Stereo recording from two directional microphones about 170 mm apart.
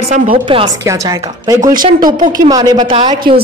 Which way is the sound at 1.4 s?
20° right (ahead or behind).